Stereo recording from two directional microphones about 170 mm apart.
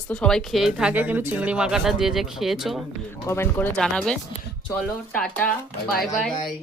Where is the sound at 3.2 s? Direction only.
15° left (ahead or behind).